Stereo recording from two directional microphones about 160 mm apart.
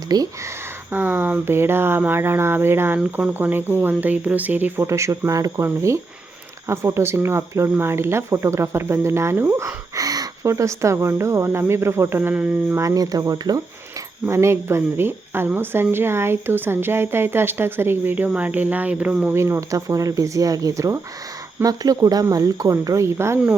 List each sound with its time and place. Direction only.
0.1 s speech: 20° right (ahead or behind)